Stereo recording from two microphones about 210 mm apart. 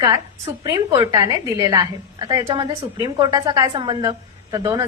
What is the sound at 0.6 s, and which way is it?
A woman's voice, 15° right (ahead or behind).